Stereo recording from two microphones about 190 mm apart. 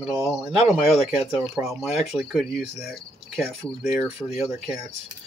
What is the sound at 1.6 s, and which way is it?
Speech, centre (ahead or behind).